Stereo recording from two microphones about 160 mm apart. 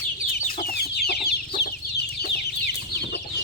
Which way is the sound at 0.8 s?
85° left.